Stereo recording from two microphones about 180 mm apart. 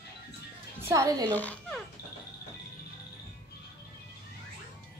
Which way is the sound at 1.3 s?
10° left (ahead or behind).